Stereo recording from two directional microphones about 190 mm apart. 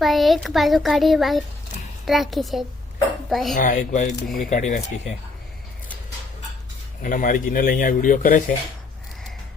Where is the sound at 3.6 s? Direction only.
40° left (ahead or behind).